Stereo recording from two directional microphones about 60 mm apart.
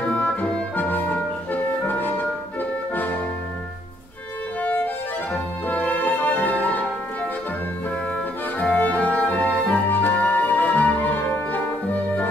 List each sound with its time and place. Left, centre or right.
0.1 s music: left
4.6 s music: left
8.5 s music: left